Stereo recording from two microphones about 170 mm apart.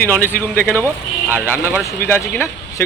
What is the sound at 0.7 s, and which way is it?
Speech, 15° right (ahead or behind).